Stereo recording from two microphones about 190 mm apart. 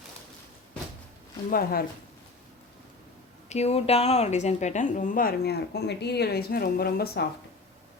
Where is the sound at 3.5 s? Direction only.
35° left (ahead or behind); by 7.2 s 55° left (ahead or behind).